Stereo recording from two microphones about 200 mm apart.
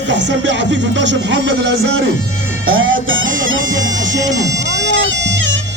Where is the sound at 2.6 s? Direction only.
85° right.